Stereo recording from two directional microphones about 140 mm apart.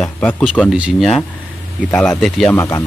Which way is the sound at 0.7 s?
5° right (ahead or behind).